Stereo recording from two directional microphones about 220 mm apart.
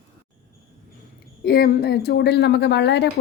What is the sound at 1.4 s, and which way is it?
Speech, 45° left (ahead or behind).